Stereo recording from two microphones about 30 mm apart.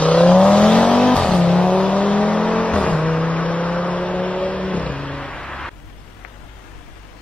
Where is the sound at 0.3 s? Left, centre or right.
Left.